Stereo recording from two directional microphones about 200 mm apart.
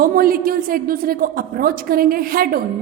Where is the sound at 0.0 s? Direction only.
45° right (ahead or behind).